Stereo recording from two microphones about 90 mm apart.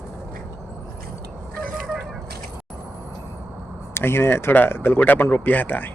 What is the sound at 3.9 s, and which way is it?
Speech, 25° left (ahead or behind).